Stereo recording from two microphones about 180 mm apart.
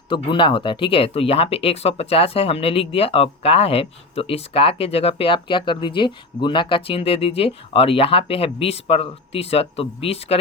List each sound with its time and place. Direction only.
0.1 s speech: 25° left (ahead or behind)